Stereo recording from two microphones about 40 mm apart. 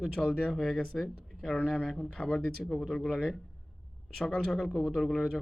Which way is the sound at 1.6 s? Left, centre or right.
Centre.